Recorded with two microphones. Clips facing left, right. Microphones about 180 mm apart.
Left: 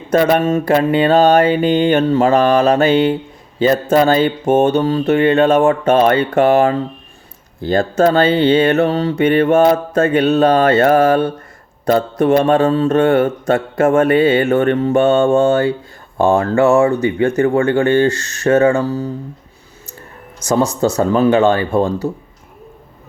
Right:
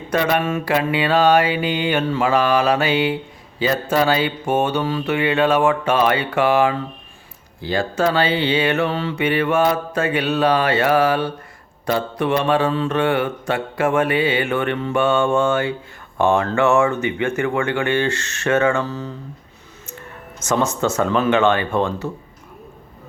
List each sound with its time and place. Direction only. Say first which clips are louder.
0.1 s speech: left 6 dB; 40° left (ahead or behind)
0.7 s mantra: left 6 dB; 45° left (ahead or behind)
16.1 s speech: left 4 dB; 35° left (ahead or behind)